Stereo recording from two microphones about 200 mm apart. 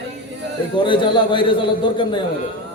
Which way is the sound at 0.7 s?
25° left (ahead or behind).